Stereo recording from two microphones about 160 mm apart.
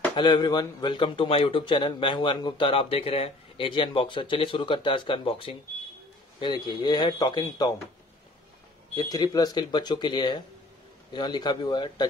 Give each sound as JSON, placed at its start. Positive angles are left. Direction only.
{"t": 0.1, "sound": "speech", "side_deg": 30}
{"t": 8.9, "sound": "speech", "side_deg": 25}